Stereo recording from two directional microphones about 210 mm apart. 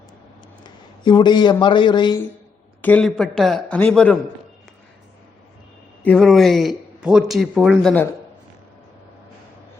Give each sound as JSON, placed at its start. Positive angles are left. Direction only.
{"t": 0.6, "sound": "a man's voice", "side_deg": 20}
{"t": 2.8, "sound": "speech", "side_deg": 5}
{"t": 6.0, "sound": "speech", "side_deg": 5}